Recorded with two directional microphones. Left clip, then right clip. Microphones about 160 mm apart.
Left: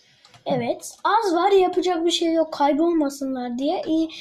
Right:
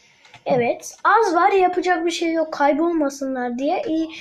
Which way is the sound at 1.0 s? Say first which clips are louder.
Right 4 dB; 10° right (ahead or behind).